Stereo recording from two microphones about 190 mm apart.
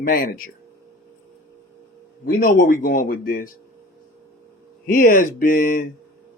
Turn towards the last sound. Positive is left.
turn(degrees=45)  # may be behind; listen again after turning